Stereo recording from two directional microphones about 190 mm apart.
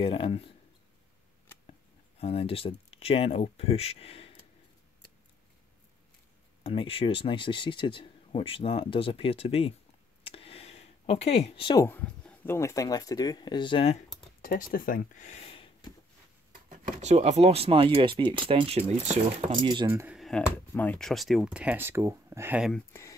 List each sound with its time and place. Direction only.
0.0 s speech: 30° left (ahead or behind)
1.7 s speech: 30° left (ahead or behind)
6.6 s speech: 30° left (ahead or behind)
10.2 s a sound: 30° left (ahead or behind)
11.8 s speech: 10° left (ahead or behind); by 13.9 s 25° left (ahead or behind)
14.4 s speech: 50° left (ahead or behind); by 15.9 s 30° left (ahead or behind)
16.6 s speech: 35° right (ahead or behind)
19.5 s speech: 25° right (ahead or behind)
19.9 s speech: 10° right (ahead or behind)
20.2 s speech: 5° left (ahead or behind)
22.7 s speech: 10° left (ahead or behind)